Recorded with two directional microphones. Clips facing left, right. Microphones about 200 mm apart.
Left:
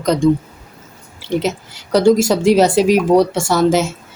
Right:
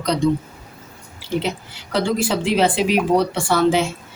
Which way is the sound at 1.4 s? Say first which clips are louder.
Left 4 dB; 40° left (ahead or behind).